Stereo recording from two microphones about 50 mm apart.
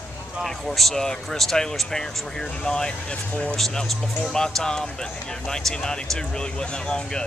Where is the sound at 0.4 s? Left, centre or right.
Centre; by 3.5 s left.